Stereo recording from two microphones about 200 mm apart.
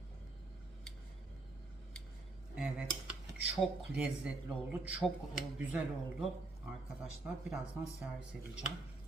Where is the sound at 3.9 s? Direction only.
5° right (ahead or behind).